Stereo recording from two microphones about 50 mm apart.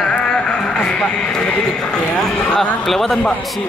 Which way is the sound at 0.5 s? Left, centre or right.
Centre.